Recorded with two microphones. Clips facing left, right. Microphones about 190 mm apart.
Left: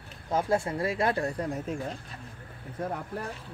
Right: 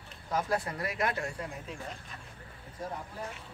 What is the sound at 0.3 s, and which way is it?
Speech, 25° left (ahead or behind).